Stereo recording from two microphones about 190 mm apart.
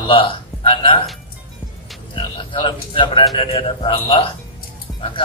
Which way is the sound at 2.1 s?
25° left (ahead or behind).